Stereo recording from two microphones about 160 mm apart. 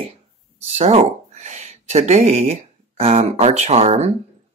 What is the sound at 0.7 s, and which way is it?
Speech, 40° right (ahead or behind).